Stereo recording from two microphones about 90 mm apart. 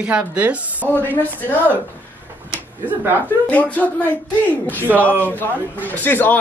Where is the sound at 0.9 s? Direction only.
20° left (ahead or behind).